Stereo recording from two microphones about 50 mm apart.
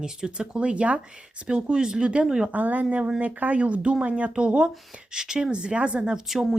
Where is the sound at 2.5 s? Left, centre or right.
Right.